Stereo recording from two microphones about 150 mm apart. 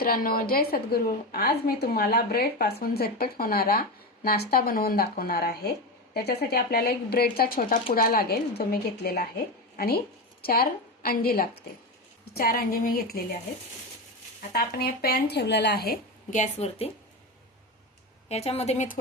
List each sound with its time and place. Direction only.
0.0 s a woman's voice: 75° left (ahead or behind)
14.5 s a woman's voice: 90° left
16.4 s speech: 45° left (ahead or behind)
18.3 s speech: 45° left (ahead or behind)